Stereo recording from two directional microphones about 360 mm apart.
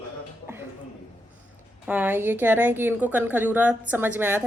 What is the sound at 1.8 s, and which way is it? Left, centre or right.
A woman's voice, centre.